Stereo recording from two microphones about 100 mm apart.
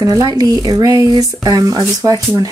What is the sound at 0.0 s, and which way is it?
Speech, 35° right (ahead or behind).